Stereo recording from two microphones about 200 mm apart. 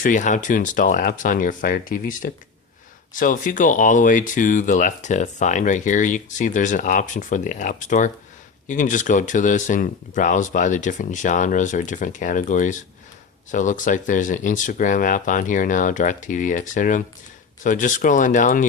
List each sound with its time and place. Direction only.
0.0 s speech: 40° left (ahead or behind)